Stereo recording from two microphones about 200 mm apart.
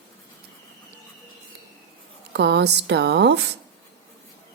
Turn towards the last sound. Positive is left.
turn(degrees=-60)  # may be behind; listen again after turning